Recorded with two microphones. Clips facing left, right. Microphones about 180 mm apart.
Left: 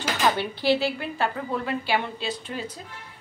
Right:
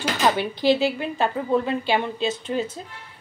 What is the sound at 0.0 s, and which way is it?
Speech, 15° right (ahead or behind).